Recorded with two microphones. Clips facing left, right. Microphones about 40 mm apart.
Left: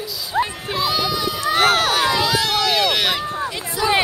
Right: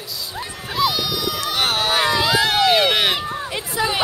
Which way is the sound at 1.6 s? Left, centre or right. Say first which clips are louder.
Left 6 dB; left.